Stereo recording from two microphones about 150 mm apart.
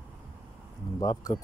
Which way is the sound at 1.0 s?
30° left (ahead or behind).